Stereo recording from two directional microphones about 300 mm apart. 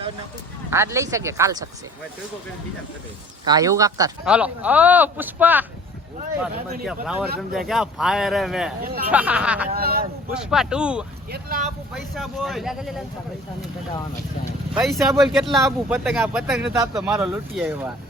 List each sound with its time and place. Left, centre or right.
0.7 s speech: centre
3.4 s speech: centre
6.8 s speech: centre
8.8 s speech: right
9.1 s speech: centre
9.6 s speech: right
10.3 s speech: centre
11.3 s speech: right
12.1 s speech: centre
14.7 s speech: centre